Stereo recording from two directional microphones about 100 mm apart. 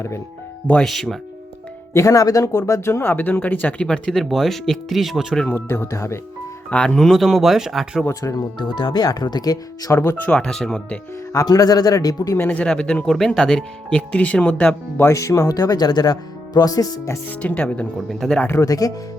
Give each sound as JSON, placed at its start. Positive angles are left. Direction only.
{"t": 0.7, "sound": "speech", "side_deg": 5}
{"t": 1.9, "sound": "speech", "side_deg": 30}
{"t": 5.5, "sound": "speech", "side_deg": 25}
{"t": 6.7, "sound": "speech", "side_deg": 10}
{"t": 8.0, "sound": "speech", "side_deg": 35}
{"t": 8.5, "sound": "speech", "side_deg": 50}
{"t": 10.2, "sound": "speech", "side_deg": 5}
{"t": 11.3, "sound": "speech", "side_deg": 40}
{"t": 12.5, "sound": "speech", "side_deg": 10}
{"t": 14.9, "sound": "speech", "side_deg": 30}
{"t": 17.4, "sound": "speech", "side_deg": 15}
{"t": 18.5, "sound": "speech", "side_deg": 35}